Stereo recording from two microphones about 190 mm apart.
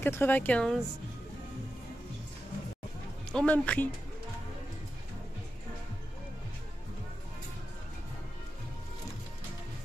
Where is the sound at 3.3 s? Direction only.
5° left (ahead or behind).